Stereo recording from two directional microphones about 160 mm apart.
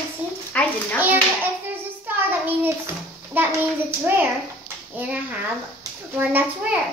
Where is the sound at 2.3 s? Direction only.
10° right (ahead or behind).